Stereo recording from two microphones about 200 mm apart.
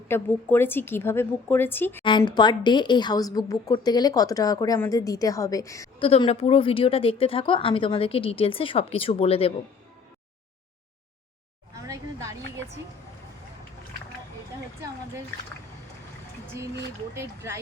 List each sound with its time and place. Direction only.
0.1 s a woman's voice: 10° left (ahead or behind)
2.0 s a woman's voice: 20° left (ahead or behind)
6.0 s a woman's voice: 25° left (ahead or behind)
11.8 s a sound: 15° right (ahead or behind)
17.2 s speech: 15° right (ahead or behind)